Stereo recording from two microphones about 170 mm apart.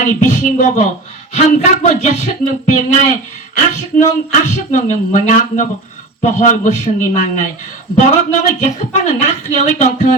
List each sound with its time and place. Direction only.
0.0 s a woman's voice: 45° left (ahead or behind)